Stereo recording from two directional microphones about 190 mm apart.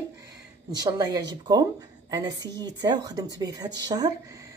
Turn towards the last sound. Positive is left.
turn(degrees=-20)  # may be behind; listen again after turning